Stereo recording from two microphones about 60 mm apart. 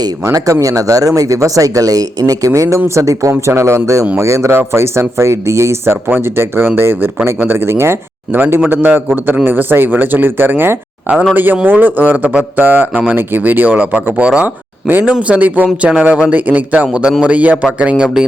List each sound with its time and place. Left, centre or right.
0.5 s speech: right
2.7 s a man's voice: right
14.8 s a man's voice: right; by 18.3 s centre